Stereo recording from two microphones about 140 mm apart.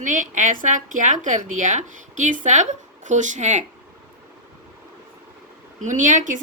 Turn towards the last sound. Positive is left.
turn(degrees=-65)  # may be behind; listen again after turning